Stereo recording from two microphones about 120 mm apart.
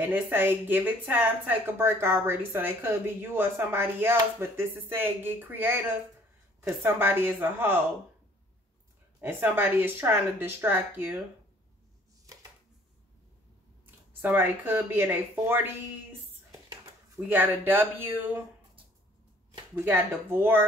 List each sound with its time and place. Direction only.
0.0 s speech: 15° right (ahead or behind)
9.2 s speech: 15° right (ahead or behind)
12.3 s a sound: 30° right (ahead or behind)
13.8 s speech: 15° right (ahead or behind)
17.3 s speech: 15° right (ahead or behind)
19.7 s speech: 20° right (ahead or behind)